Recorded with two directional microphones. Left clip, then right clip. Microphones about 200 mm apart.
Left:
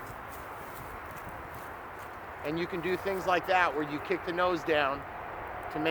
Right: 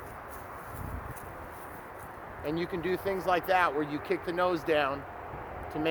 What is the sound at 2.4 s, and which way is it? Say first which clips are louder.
A man's voice: even; 50° right (ahead or behind).